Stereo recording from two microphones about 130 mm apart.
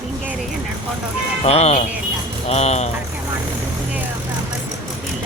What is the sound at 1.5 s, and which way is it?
Speech, 55° left (ahead or behind).